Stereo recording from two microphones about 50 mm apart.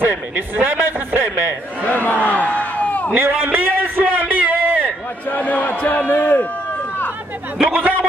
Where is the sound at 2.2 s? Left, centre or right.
Left.